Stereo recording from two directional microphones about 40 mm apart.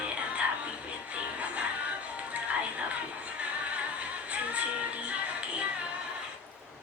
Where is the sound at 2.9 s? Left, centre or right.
Right.